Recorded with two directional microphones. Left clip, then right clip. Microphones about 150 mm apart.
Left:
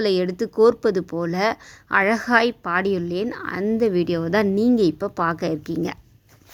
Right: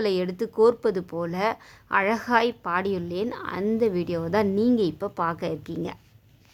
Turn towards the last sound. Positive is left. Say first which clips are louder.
# left 6 dB
turn(degrees=25)  # may be behind; listen again after turning